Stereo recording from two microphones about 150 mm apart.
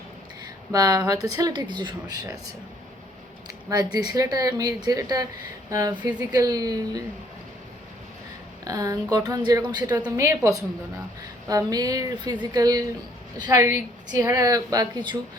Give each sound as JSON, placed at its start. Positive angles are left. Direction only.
{"t": 0.7, "sound": "a woman's voice", "side_deg": -25}
{"t": 3.9, "sound": "a woman's voice", "side_deg": -25}
{"t": 8.6, "sound": "a woman's voice", "side_deg": -25}